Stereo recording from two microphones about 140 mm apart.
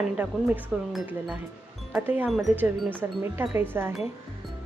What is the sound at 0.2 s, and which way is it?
Speech, 10° right (ahead or behind).